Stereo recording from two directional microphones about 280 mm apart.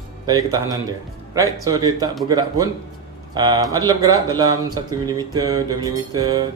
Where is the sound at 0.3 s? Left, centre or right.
Centre.